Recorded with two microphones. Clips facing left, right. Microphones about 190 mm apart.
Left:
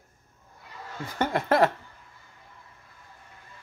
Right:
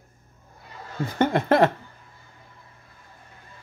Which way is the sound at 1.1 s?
25° right (ahead or behind).